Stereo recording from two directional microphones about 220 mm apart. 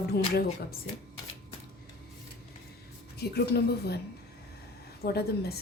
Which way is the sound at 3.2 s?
45° left (ahead or behind).